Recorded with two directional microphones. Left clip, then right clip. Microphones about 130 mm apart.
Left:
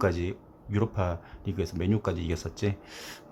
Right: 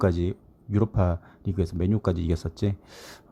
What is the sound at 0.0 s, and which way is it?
Speech, 35° right (ahead or behind).